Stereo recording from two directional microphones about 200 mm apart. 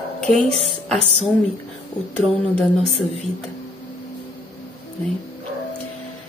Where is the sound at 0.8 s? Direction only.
5° left (ahead or behind).